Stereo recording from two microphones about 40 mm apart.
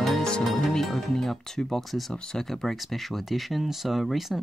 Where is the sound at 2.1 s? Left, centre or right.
Centre.